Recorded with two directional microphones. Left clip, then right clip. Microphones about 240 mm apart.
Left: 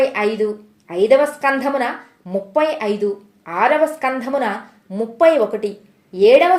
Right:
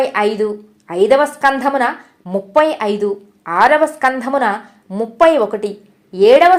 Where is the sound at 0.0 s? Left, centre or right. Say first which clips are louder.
Right 2 dB; centre.